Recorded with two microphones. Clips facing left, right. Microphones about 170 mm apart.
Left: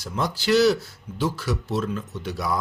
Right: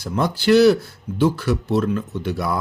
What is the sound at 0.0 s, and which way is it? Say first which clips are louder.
Speech: right 6 dB; 60° right (ahead or behind).